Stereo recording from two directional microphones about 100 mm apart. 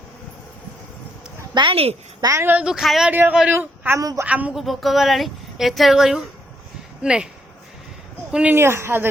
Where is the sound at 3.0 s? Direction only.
15° right (ahead or behind).